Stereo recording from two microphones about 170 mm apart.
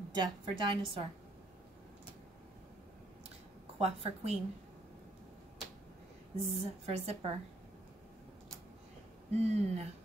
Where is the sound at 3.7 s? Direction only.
40° right (ahead or behind).